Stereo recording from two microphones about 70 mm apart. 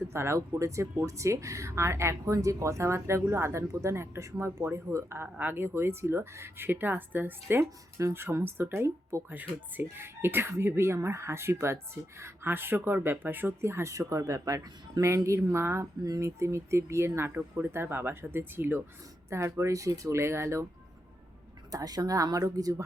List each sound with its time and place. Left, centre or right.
0.1 s speech: right
9.3 s speech: right
19.5 s speech: right
21.7 s speech: right